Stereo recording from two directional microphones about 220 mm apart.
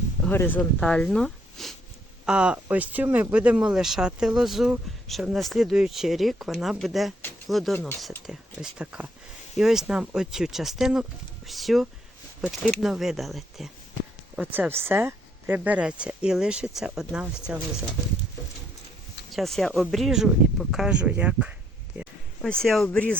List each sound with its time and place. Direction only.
0.3 s speech: 10° left (ahead or behind)
19.3 s speech: centre (ahead or behind)
22.6 s speech: centre (ahead or behind)